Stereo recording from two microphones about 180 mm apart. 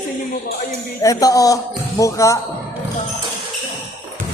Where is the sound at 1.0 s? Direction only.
20° left (ahead or behind).